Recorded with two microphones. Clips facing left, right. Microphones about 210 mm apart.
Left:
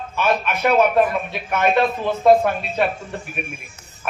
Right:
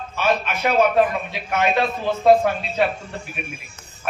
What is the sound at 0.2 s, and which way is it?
A man's voice, 55° left (ahead or behind).